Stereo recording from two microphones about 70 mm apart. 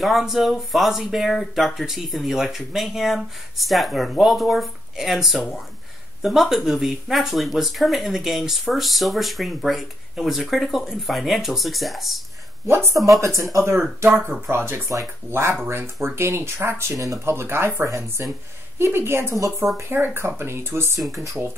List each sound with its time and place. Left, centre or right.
0.0 s speech: centre
13.0 s speech: right
15.5 s speech: right
17.2 s speech: right
17.8 s speech: right
18.8 s speech: right
21.1 s speech: right